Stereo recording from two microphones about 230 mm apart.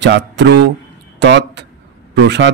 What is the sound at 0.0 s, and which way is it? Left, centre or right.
A man's voice, right.